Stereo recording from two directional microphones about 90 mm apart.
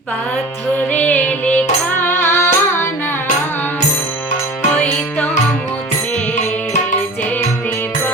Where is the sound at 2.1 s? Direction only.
25° left (ahead or behind).